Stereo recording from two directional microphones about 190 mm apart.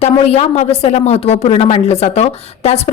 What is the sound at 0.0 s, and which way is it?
A woman's voice, 35° left (ahead or behind).